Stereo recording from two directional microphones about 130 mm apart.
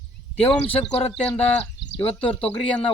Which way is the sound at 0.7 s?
50° left (ahead or behind).